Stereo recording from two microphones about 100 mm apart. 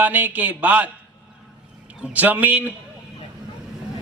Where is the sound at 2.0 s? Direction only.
15° right (ahead or behind).